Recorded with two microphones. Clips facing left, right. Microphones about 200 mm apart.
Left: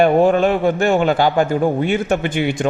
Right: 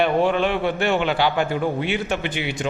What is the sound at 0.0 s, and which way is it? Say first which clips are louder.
A man's voice: left 6 dB; 45° left (ahead or behind).